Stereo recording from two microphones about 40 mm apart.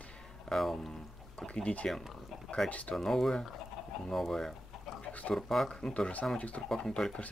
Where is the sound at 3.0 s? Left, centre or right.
Centre.